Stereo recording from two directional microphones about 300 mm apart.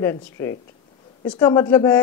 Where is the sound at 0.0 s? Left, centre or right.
Centre.